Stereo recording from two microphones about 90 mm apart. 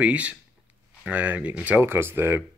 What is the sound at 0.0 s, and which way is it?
Speech, 15° right (ahead or behind).